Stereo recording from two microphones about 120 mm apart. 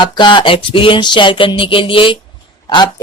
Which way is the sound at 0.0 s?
40° left (ahead or behind).